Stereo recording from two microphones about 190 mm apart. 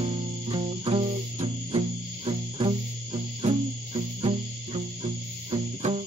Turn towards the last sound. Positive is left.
turn(degrees=-30)  # may be behind; listen again after turning